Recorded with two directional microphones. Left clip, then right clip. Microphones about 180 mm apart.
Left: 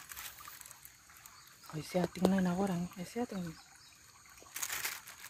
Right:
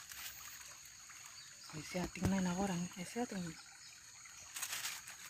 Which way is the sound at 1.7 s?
65° left (ahead or behind).